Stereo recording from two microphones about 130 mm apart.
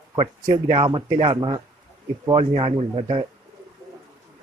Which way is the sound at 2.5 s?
55° right (ahead or behind).